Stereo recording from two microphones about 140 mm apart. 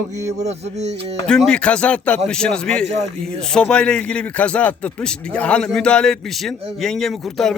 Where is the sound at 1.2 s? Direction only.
5° left (ahead or behind).